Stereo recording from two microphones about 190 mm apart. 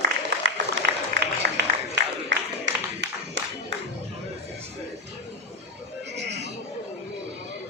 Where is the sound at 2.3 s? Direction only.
70° right (ahead or behind).